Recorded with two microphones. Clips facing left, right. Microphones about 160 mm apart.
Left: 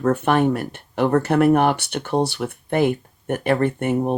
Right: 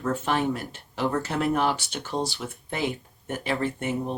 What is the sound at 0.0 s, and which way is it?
Speech, 60° left (ahead or behind).